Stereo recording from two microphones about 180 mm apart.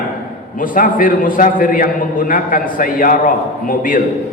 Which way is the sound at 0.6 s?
50° left (ahead or behind).